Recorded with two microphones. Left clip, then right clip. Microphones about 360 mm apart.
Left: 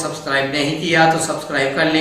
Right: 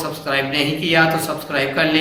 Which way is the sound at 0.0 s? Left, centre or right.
Centre.